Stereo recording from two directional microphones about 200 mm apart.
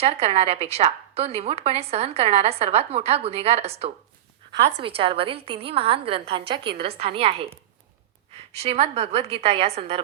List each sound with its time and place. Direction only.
0.0 s a woman's voice: 30° right (ahead or behind)